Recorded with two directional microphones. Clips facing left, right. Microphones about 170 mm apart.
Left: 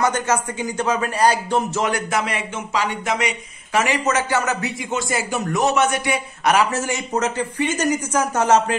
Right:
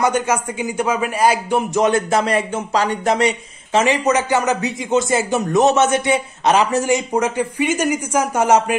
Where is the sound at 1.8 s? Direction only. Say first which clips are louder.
Right 6 dB; 30° right (ahead or behind).